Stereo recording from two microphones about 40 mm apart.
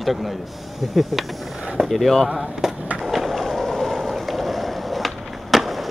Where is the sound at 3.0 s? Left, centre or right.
Centre.